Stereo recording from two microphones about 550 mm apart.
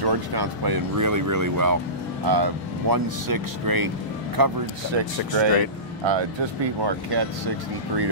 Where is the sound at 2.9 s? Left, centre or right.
Right.